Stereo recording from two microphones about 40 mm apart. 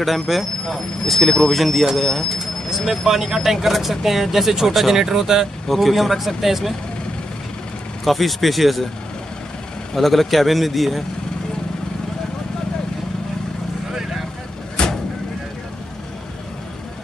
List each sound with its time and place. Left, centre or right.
0.0 s speech: centre
5.7 s speech: centre
8.0 s speech: centre
9.9 s speech: centre
14.8 s vehicle: centre